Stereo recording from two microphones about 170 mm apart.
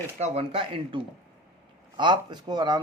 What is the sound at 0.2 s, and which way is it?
A man's voice, 35° right (ahead or behind).